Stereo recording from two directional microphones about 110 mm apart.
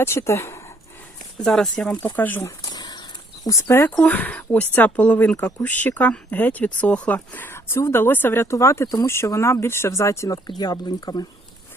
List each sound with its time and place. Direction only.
0.0 s speech: 25° left (ahead or behind)
1.4 s speech: 5° left (ahead or behind)
2.6 s a sound: 35° left (ahead or behind)
3.4 s speech: 30° left (ahead or behind)
3.9 s speech: 10° left (ahead or behind); by 11.3 s 40° left (ahead or behind)